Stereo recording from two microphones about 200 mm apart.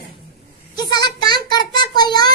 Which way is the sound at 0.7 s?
20° left (ahead or behind).